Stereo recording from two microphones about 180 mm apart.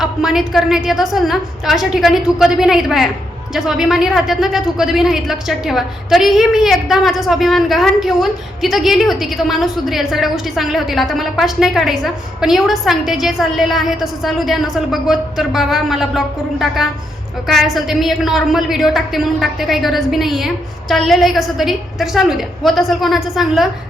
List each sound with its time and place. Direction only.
0.0 s a woman's voice: centre (ahead or behind)